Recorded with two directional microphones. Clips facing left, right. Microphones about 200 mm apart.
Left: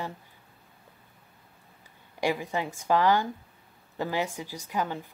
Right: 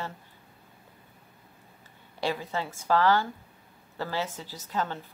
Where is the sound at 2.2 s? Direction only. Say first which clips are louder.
Left 2 dB; 15° left (ahead or behind).